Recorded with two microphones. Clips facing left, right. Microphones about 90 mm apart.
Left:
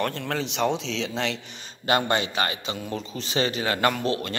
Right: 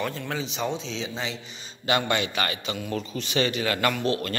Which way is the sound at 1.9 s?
40° left (ahead or behind).